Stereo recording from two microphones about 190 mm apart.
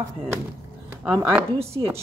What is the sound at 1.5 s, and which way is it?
Speech, 30° right (ahead or behind).